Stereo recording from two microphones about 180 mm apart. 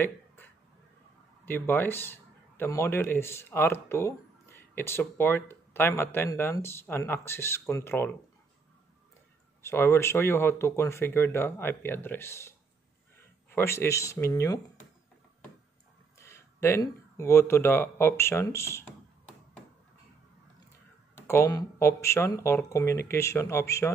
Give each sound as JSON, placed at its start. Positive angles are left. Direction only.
{"t": 1.4, "sound": "a man's voice", "side_deg": 10}
{"t": 9.6, "sound": "a man's voice", "side_deg": 15}
{"t": 16.2, "sound": "speech", "side_deg": 15}
{"t": 21.1, "sound": "a man's voice", "side_deg": 15}